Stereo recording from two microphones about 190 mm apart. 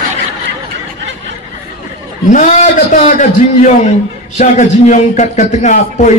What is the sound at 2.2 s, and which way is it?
A man's voice, 40° left (ahead or behind).